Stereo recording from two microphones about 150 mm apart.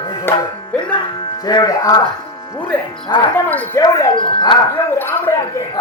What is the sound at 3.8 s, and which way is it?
Speech, 30° left (ahead or behind).